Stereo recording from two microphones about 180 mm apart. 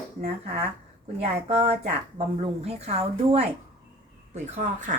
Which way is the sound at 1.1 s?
35° right (ahead or behind).